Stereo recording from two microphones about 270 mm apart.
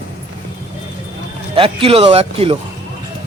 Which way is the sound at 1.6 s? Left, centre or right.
Right.